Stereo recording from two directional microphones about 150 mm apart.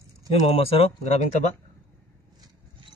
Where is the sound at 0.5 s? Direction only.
40° left (ahead or behind).